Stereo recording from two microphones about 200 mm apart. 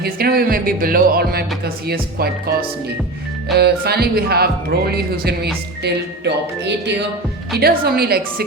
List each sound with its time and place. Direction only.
0.0 s speech: 50° right (ahead or behind)
3.5 s speech: 55° right (ahead or behind)